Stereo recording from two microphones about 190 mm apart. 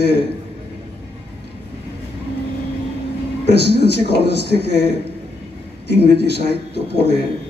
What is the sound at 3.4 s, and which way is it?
A man's voice, 60° left (ahead or behind).